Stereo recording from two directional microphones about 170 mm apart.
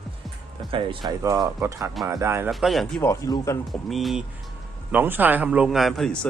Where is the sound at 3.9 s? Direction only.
Centre (ahead or behind).